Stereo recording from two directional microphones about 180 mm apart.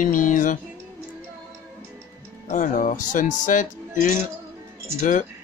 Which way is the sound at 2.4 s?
45° left (ahead or behind).